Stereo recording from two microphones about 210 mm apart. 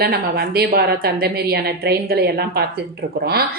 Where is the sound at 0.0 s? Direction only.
50° right (ahead or behind).